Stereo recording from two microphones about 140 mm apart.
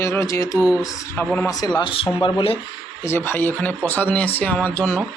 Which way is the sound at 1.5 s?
25° left (ahead or behind).